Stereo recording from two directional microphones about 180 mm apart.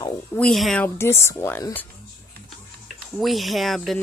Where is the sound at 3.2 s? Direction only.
Centre (ahead or behind).